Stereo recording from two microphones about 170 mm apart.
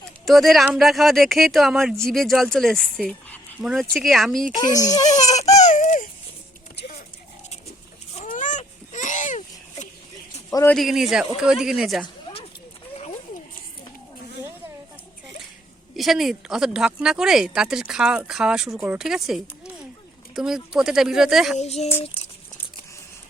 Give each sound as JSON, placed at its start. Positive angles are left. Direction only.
{"t": 0.3, "sound": "speech", "side_deg": 0}
{"t": 4.5, "sound": "speech", "side_deg": 20}
{"t": 5.0, "sound": "speech", "side_deg": 40}
{"t": 5.5, "sound": "a sound", "side_deg": 45}
{"t": 6.7, "sound": "clip-clop", "side_deg": 60}
{"t": 8.1, "sound": "a sound", "side_deg": 45}
{"t": 10.5, "sound": "a man's voice", "side_deg": 15}
{"t": 10.8, "sound": "speech", "side_deg": 0}
{"t": 16.0, "sound": "speech", "side_deg": 0}
{"t": 21.6, "sound": "speech", "side_deg": 40}